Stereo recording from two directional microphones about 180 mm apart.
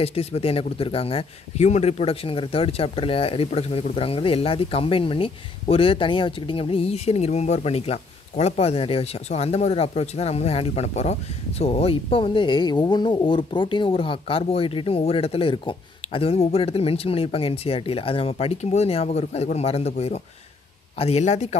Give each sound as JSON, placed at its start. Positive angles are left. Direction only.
{"t": 0.0, "sound": "a man's voice", "side_deg": 35}